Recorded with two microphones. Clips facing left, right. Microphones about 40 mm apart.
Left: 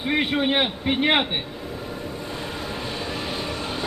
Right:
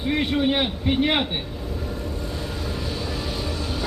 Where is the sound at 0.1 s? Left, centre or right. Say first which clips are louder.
Even; left.